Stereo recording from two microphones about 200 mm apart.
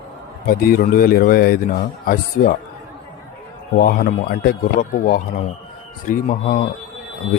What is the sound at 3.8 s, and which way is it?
A man's voice, 45° left (ahead or behind).